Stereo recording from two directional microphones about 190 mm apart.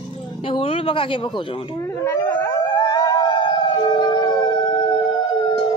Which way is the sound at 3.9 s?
20° left (ahead or behind).